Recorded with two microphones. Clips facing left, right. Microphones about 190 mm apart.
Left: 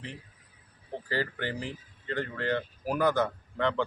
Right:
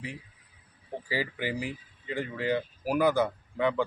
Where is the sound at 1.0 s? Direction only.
10° right (ahead or behind).